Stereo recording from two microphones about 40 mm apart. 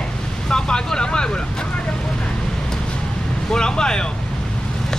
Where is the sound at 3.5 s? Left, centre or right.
Centre.